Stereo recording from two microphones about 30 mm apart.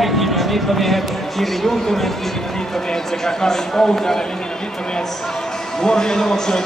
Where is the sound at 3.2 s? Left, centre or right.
Centre.